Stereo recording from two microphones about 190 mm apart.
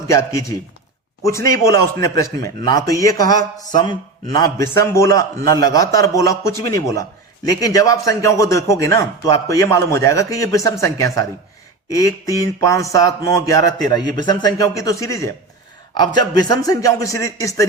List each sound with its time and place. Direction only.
0.1 s speech: 15° left (ahead or behind)